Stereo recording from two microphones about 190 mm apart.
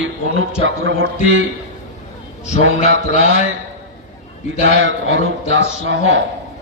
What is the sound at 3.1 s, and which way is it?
Speech, 35° left (ahead or behind).